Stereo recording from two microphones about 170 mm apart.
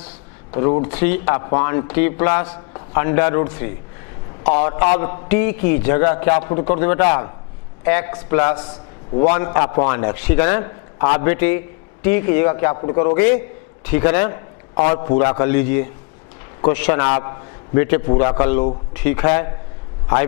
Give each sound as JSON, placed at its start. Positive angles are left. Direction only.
{"t": 0.5, "sound": "a man's voice", "side_deg": 20}
{"t": 8.5, "sound": "a man's voice", "side_deg": 35}
{"t": 9.3, "sound": "a man's voice", "side_deg": 20}